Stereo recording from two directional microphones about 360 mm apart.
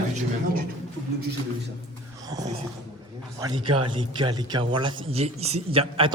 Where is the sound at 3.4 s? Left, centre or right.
Centre.